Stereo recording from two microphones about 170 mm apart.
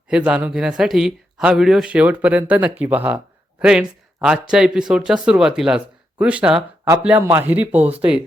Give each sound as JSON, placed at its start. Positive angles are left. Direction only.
{"t": 0.1, "sound": "speech", "side_deg": -5}